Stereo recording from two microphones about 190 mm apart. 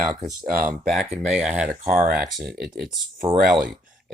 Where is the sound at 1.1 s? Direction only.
5° right (ahead or behind).